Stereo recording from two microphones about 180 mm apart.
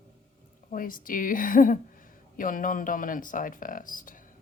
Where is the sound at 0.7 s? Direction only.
50° left (ahead or behind).